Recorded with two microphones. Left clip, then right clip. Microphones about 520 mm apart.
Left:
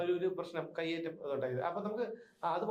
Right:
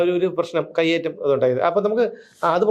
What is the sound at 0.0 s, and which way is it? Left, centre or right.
A man's voice, right.